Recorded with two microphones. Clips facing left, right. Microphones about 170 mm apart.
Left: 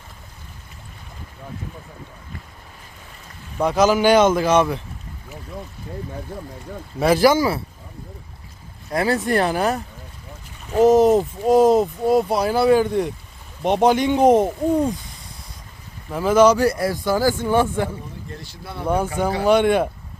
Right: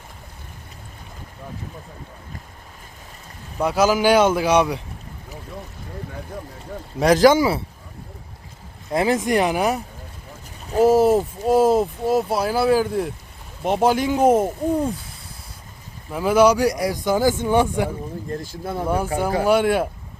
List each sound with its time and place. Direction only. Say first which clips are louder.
3.6 s speech: left 1 dB; 5° right (ahead or behind)
7.2 s speech: right 3 dB; 20° right (ahead or behind)
8.9 s speech: right 1 dB; 20° right (ahead or behind); by 14.9 s 5° right (ahead or behind)
16.1 s speech: left 1 dB; 10° right (ahead or behind)
18.3 s speech: right 8 dB; 45° right (ahead or behind)
18.9 s speech: left 2 dB; 10° right (ahead or behind)